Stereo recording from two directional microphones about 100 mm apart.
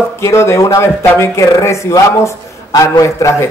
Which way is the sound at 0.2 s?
25° left (ahead or behind).